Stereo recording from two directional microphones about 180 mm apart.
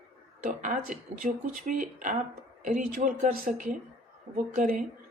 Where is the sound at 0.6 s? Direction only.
45° right (ahead or behind).